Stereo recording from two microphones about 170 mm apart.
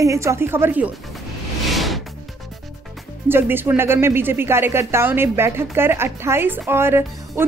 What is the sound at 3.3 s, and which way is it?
A woman's voice, 15° right (ahead or behind).